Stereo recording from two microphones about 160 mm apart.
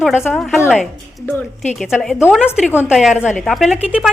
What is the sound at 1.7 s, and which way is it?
A woman's voice, centre (ahead or behind).